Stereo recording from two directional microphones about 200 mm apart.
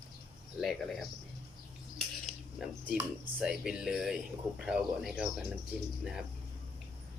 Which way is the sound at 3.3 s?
Centre (ahead or behind).